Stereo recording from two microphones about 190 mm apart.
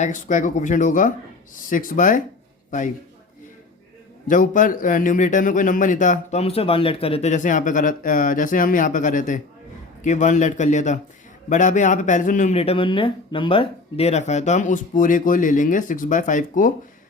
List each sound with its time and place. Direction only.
0.0 s a man's voice: 40° left (ahead or behind)
4.3 s speech: 45° left (ahead or behind)